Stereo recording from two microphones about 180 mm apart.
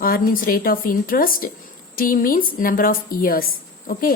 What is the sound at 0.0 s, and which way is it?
A woman's voice, 55° left (ahead or behind).